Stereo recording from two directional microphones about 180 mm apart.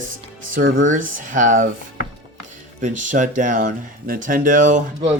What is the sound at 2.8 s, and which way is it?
Speech, 45° right (ahead or behind).